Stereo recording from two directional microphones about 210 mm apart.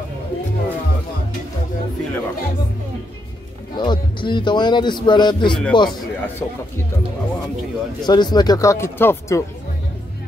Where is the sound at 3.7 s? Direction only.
20° left (ahead or behind).